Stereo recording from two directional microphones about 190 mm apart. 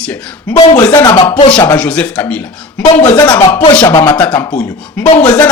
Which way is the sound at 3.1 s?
20° left (ahead or behind).